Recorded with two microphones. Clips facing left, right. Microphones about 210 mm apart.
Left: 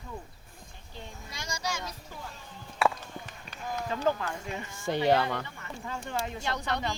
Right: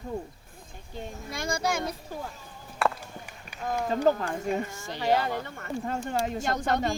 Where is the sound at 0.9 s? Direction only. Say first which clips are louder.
Right 7 dB; 55° right (ahead or behind).